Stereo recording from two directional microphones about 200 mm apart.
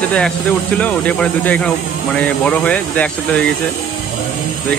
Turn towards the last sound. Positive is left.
turn(degrees=5)  # may be behind; listen again after turning